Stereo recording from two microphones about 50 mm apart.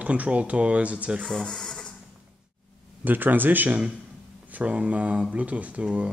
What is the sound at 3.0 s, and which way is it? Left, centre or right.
Speech, right.